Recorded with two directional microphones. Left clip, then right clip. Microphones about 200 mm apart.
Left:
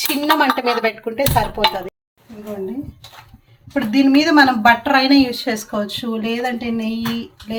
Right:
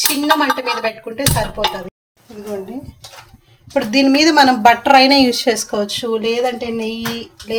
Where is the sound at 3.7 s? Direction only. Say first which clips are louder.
Right 2 dB; 35° right (ahead or behind).